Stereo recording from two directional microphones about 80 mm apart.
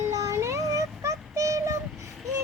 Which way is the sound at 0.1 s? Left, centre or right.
Right.